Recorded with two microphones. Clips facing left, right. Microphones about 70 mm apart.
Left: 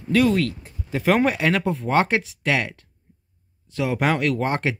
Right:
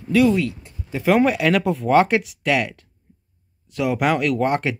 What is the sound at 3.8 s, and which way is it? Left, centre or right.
Speech, left.